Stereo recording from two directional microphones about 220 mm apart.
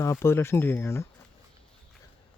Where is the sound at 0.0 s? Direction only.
10° left (ahead or behind).